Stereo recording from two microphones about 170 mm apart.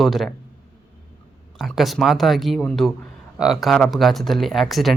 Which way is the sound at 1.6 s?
Centre (ahead or behind).